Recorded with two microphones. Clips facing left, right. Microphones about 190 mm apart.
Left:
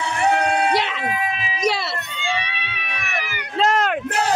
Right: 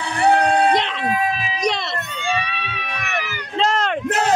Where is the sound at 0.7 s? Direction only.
5° left (ahead or behind).